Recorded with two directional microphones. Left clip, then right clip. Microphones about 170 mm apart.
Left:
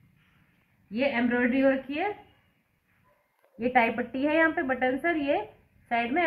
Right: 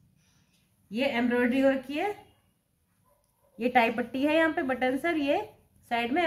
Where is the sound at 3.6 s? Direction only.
35° right (ahead or behind).